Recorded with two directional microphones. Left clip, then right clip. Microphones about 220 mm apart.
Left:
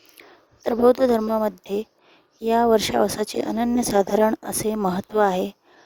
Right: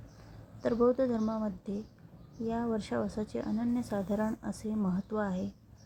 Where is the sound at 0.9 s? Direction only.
45° left (ahead or behind).